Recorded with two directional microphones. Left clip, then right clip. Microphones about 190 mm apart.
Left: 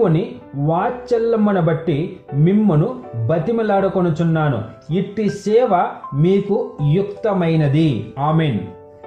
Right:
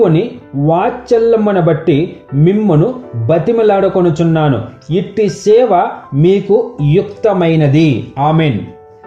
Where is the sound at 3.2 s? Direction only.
25° right (ahead or behind).